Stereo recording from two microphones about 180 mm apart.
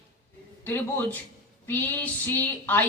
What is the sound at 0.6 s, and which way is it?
Speech, 10° left (ahead or behind).